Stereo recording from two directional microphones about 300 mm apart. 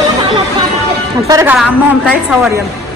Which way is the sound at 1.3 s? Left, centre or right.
Centre.